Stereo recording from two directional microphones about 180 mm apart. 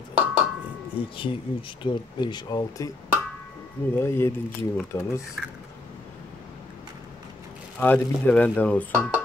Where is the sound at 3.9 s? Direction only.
15° left (ahead or behind).